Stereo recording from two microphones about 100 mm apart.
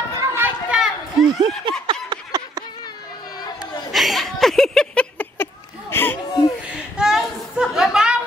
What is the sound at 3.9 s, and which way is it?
Chuckle, centre (ahead or behind).